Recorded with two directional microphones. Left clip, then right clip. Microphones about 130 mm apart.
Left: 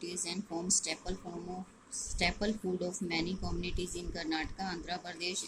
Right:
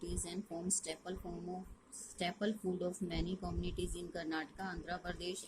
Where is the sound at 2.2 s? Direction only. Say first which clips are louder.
Left 5 dB; 55° right (ahead or behind).